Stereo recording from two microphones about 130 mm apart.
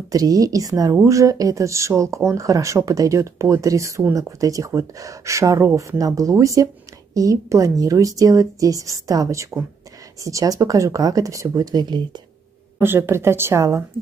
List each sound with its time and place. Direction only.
0.1 s speech: 30° right (ahead or behind)
12.7 s speech: 15° right (ahead or behind)